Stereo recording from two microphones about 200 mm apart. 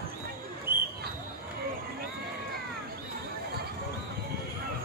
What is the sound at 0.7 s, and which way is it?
Basketball bounce, 20° left (ahead or behind).